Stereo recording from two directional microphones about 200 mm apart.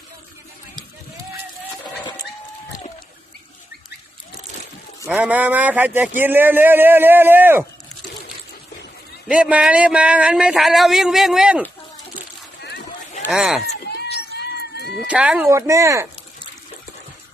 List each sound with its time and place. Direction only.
1.8 s a sound: 20° left (ahead or behind)
5.0 s speech: 5° right (ahead or behind)
9.2 s speech: 5° right (ahead or behind)
13.3 s speech: 5° right (ahead or behind)
13.7 s a sound: 55° left (ahead or behind)
15.0 s speech: 5° right (ahead or behind)